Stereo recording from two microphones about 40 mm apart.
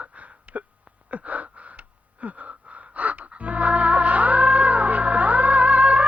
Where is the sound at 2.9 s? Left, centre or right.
Right.